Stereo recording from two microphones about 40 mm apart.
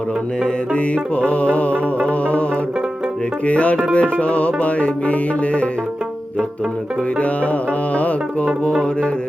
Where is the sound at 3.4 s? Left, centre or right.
Left.